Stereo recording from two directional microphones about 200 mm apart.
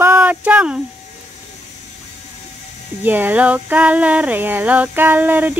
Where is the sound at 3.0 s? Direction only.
10° right (ahead or behind).